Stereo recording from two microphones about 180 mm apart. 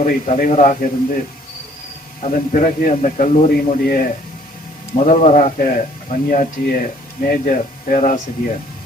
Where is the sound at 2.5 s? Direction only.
50° left (ahead or behind).